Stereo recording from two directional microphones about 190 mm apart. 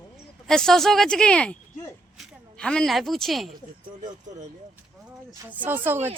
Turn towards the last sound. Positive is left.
turn(degrees=-10)  # may be behind; listen again after turning